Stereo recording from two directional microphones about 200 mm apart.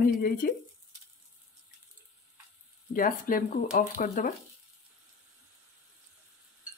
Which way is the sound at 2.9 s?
45° left (ahead or behind).